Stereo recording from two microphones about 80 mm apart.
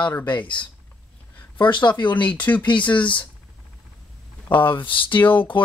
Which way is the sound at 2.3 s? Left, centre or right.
Centre.